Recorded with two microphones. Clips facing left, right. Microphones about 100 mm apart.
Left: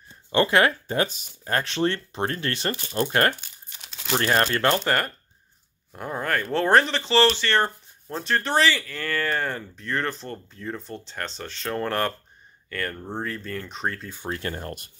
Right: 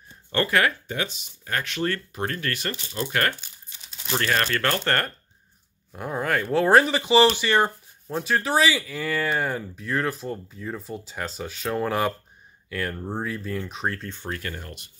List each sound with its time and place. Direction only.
0.3 s speech: 20° left (ahead or behind)
0.8 s speech: 40° left (ahead or behind)
2.7 s speech: 45° left (ahead or behind)
3.3 s crumpling: 65° left (ahead or behind)
4.2 s speech: 30° left (ahead or behind)
4.8 s speech: 5° left (ahead or behind)
14.3 s speech: 30° left (ahead or behind)